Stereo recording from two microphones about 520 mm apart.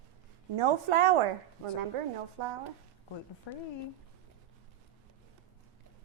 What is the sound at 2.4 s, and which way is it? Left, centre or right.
Speech, right.